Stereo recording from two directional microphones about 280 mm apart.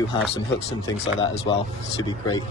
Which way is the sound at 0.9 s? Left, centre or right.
Left.